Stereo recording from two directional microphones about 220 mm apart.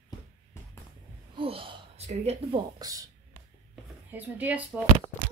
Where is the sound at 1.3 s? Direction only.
25° right (ahead or behind).